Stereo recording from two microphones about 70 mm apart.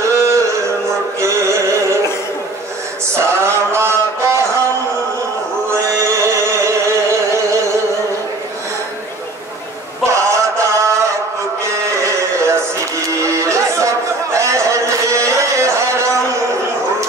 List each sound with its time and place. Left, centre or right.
0.0 s a sound: right
1.2 s music: right
3.2 s mantra: right
5.7 s music: right
10.0 s mantra: right
11.6 s a sound: right
13.1 s chatter: right